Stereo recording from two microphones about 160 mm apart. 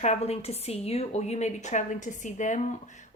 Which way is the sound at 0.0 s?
45° left (ahead or behind).